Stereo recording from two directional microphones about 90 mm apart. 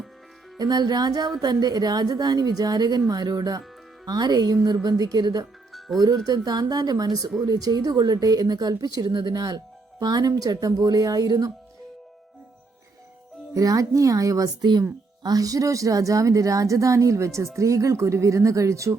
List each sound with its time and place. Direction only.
0.6 s a woman's voice: 50° right (ahead or behind)
13.5 s a woman's voice: 40° right (ahead or behind)